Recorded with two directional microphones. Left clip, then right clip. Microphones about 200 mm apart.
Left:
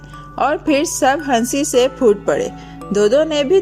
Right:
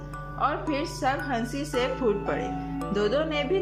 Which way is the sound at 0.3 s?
40° left (ahead or behind).